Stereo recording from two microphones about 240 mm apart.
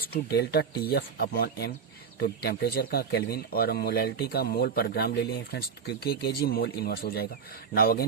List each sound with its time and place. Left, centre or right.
0.1 s speech: left